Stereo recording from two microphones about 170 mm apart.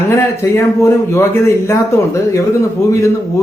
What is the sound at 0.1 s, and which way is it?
Speech, 15° left (ahead or behind).